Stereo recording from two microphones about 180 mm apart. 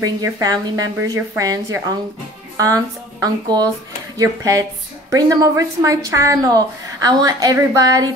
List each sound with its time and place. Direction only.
0.0 s speech: 20° right (ahead or behind)